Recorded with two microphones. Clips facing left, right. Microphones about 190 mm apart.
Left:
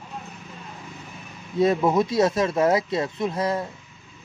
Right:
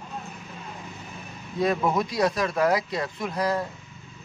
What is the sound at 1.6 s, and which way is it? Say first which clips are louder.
A man's voice: left 4 dB; 20° left (ahead or behind).